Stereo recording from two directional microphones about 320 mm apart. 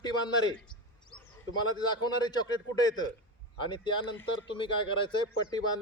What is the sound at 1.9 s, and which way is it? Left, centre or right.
A man's voice, centre.